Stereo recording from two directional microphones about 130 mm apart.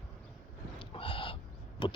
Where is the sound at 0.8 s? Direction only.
40° left (ahead or behind).